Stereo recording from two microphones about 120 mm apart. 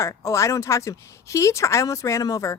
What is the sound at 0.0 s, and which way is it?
A woman's voice, 25° left (ahead or behind).